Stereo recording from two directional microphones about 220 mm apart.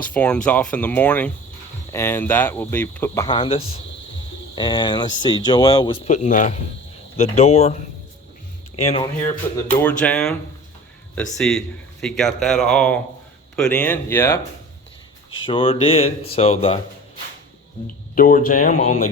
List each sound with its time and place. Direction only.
0.0 s speech: 5° left (ahead or behind)
3.2 s speech: 25° left (ahead or behind)
6.1 s speech: 35° left (ahead or behind)
10.0 s speech: 5° left (ahead or behind)
11.3 s speech: centre (ahead or behind)
15.4 s speech: 25° left (ahead or behind)
17.8 s speech: 40° left (ahead or behind)